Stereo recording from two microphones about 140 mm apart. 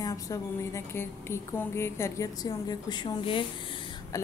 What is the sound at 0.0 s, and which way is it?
A woman's voice, 25° left (ahead or behind).